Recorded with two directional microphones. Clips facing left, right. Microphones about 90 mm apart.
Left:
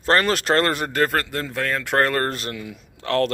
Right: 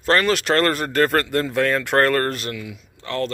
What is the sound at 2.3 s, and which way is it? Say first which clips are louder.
Speech: right 1 dB; 30° left (ahead or behind).